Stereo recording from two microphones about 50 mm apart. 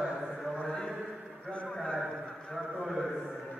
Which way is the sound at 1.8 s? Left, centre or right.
Centre.